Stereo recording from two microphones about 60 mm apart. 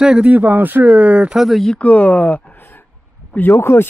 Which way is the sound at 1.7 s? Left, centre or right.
Left.